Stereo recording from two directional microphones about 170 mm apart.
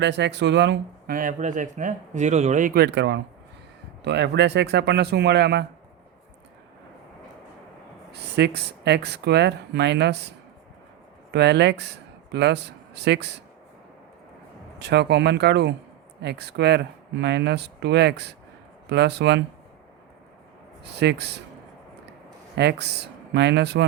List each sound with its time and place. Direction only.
0.0 s speech: 90° right
1.1 s a man's voice: 50° right (ahead or behind)
2.8 s speech: 90° right
8.1 s speech: 80° right
14.8 s speech: 80° right
20.8 s speech: 80° right
22.5 s speech: 80° right